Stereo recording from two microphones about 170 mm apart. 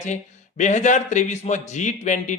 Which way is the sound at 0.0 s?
45° left (ahead or behind).